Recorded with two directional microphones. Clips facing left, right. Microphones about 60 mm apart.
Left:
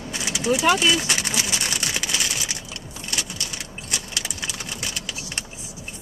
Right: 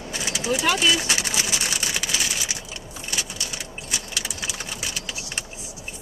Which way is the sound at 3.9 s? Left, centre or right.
Centre.